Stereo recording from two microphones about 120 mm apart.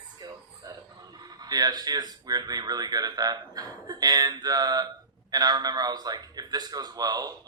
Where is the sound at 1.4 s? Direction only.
35° right (ahead or behind).